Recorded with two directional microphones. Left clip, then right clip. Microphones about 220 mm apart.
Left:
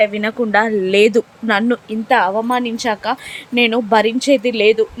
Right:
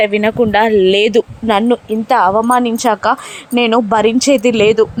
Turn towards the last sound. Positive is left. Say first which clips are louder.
# right 3 dB
turn(degrees=-20)  # may be behind; listen again after turning